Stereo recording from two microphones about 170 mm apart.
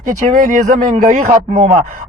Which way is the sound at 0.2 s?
50° right (ahead or behind).